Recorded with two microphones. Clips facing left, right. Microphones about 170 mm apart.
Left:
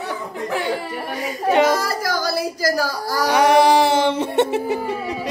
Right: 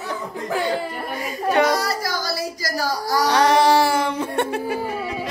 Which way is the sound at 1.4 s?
20° left (ahead or behind).